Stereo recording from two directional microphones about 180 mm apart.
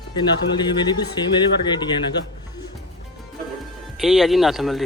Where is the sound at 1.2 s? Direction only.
25° left (ahead or behind).